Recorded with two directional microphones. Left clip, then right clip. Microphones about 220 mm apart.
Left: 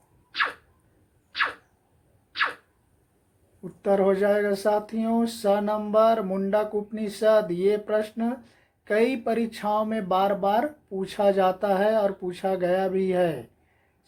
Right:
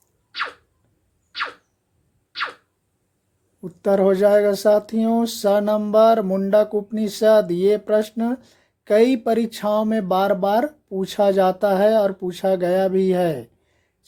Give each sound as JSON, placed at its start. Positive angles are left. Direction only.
{"t": 3.6, "sound": "speech", "side_deg": -55}